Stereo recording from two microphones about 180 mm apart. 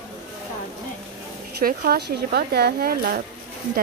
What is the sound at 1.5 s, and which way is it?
Speech, 60° right (ahead or behind).